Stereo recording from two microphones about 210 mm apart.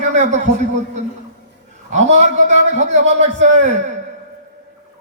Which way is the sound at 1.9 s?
35° right (ahead or behind).